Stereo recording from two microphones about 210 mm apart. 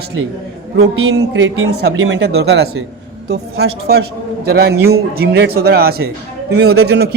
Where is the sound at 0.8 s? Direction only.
75° right (ahead or behind).